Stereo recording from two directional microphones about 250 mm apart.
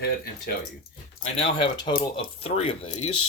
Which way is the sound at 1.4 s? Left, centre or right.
Centre.